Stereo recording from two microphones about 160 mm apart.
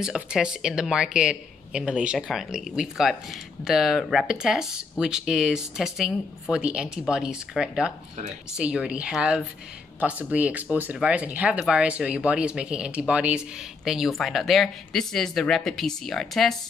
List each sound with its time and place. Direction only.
0.0 s speech: 5° right (ahead or behind)